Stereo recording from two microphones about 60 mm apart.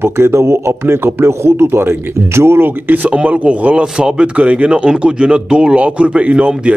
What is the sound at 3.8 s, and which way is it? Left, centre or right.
Speech, centre.